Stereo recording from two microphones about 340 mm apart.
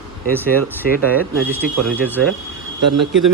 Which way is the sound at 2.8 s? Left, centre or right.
Right.